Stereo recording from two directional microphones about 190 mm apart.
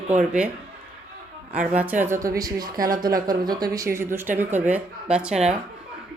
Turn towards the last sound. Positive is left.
turn(degrees=-5)  # may be behind; listen again after turning